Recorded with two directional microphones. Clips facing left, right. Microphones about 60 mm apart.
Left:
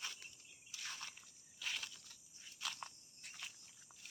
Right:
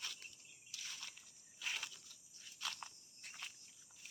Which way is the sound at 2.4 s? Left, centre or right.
Centre.